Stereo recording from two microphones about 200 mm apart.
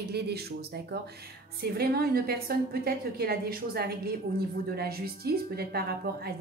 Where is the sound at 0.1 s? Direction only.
55° right (ahead or behind).